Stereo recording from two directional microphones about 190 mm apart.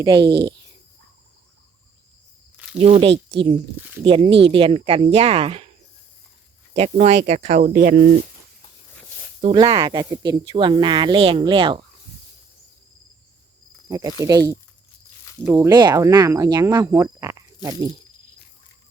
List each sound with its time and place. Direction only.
0.0 s speech: 25° right (ahead or behind)
2.7 s speech: 30° right (ahead or behind)
3.8 s speech: 10° right (ahead or behind)
4.0 s speech: 25° right (ahead or behind)
6.7 s speech: 35° right (ahead or behind)
9.4 s speech: 30° right (ahead or behind)
13.8 s speech: 20° right (ahead or behind)